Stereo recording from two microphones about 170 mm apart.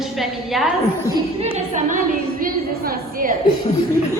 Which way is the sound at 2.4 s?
60° right (ahead or behind).